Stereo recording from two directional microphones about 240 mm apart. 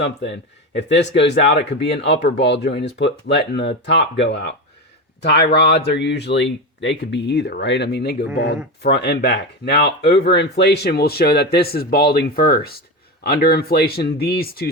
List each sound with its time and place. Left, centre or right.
0.0 s speech: left